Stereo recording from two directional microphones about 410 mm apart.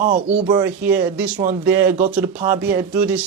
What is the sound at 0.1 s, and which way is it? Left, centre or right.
Speech, centre.